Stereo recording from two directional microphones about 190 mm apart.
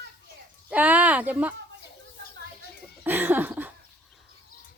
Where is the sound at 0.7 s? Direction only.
10° right (ahead or behind).